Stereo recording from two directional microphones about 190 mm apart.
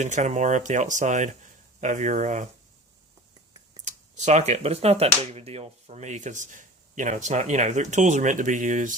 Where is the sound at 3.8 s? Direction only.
40° right (ahead or behind).